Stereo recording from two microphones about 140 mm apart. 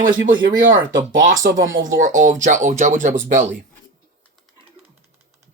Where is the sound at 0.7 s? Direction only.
30° right (ahead or behind).